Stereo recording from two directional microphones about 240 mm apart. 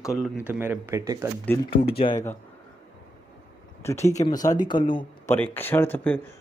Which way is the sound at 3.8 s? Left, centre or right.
Centre.